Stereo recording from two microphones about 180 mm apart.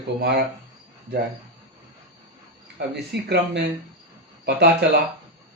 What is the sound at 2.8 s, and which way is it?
Speech, 65° right (ahead or behind).